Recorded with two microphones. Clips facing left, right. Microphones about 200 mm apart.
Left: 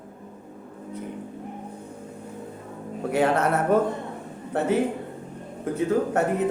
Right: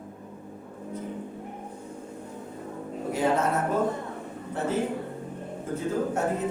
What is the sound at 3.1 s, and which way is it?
Speech, 70° left (ahead or behind).